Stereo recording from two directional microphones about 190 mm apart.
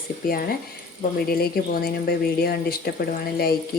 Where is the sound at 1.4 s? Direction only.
55° left (ahead or behind).